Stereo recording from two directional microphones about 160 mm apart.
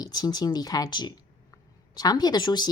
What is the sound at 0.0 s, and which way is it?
A woman's voice, 25° left (ahead or behind).